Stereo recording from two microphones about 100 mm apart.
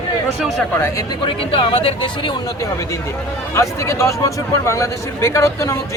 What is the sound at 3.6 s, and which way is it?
A man's voice, 30° left (ahead or behind).